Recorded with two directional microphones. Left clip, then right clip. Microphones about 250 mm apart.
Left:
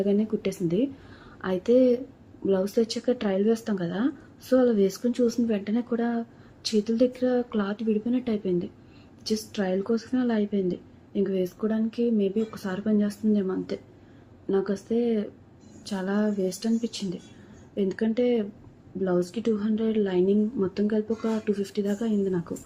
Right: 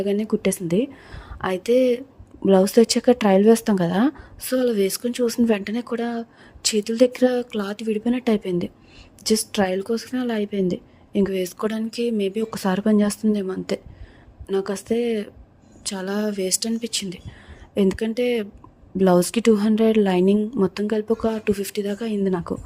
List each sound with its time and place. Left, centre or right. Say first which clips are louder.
0.0 s speech: right 4 dB; right